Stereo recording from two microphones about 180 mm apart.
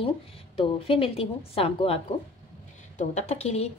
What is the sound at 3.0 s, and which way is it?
Speech, 40° left (ahead or behind).